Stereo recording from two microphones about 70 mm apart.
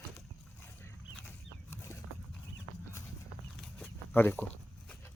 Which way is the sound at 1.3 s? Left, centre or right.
Left.